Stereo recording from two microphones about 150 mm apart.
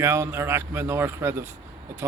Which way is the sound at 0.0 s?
20° right (ahead or behind).